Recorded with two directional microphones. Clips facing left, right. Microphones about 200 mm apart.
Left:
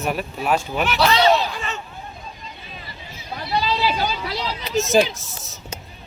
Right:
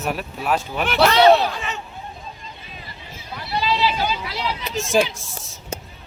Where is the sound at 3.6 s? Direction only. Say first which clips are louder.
Right 1 dB; 40° left (ahead or behind).